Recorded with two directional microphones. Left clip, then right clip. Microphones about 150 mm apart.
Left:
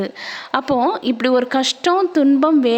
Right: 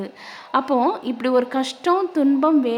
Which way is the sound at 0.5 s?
30° left (ahead or behind).